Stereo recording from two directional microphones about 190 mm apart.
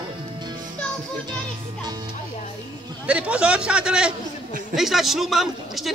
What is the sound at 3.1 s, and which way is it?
A man's voice, 5° right (ahead or behind).